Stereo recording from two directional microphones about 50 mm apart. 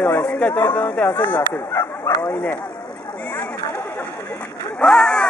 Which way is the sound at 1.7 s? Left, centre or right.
Left.